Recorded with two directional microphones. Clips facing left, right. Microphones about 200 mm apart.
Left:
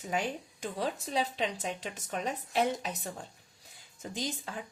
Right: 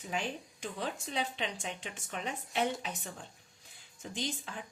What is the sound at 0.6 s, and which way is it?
A woman's voice, 40° left (ahead or behind).